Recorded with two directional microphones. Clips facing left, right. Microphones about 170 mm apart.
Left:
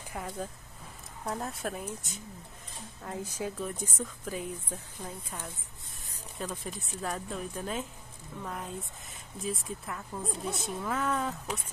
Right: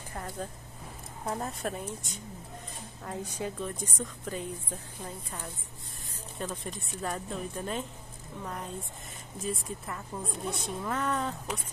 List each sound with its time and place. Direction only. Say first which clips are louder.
0.1 s a woman's voice: left 1 dB; 5° left (ahead or behind)